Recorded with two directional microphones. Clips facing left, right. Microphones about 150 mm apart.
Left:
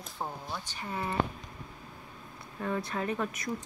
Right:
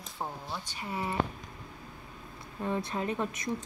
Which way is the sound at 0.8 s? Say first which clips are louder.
Right 1 dB; 15° right (ahead or behind).